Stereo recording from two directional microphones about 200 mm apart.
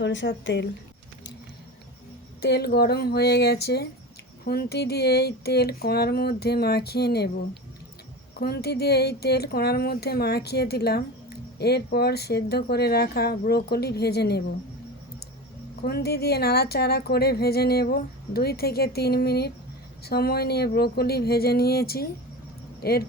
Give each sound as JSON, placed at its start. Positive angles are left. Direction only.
{"t": 0.0, "sound": "speech", "side_deg": 65}
{"t": 2.4, "sound": "speech", "side_deg": 60}
{"t": 8.4, "sound": "speech", "side_deg": 50}
{"t": 15.8, "sound": "speech", "side_deg": 50}